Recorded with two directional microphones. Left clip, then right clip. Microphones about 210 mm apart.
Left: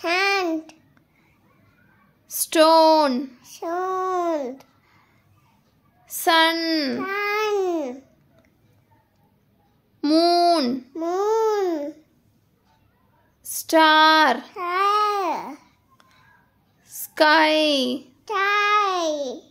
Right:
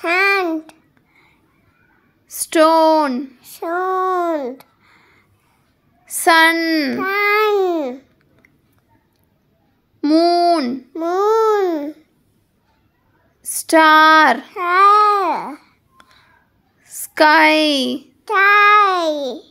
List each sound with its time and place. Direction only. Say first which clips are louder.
0.0 s child singing: right 6 dB; 20° right (ahead or behind)
2.2 s speech: right 3 dB; 15° right (ahead or behind)
3.5 s speech: right 6 dB; 20° right (ahead or behind)
6.0 s a child's voice: right 6 dB; 30° right (ahead or behind)
7.0 s babbling: right 8 dB; 45° right (ahead or behind); by 8.0 s 25° right (ahead or behind)
9.9 s a sound: right 4 dB; 10° right (ahead or behind)
10.9 s babbling: right 9 dB; 25° right (ahead or behind)
13.4 s speech: right 5 dB; 25° right (ahead or behind)
14.5 s babbling: right 9 dB; 30° right (ahead or behind)
16.8 s speech: right 5 dB; 25° right (ahead or behind)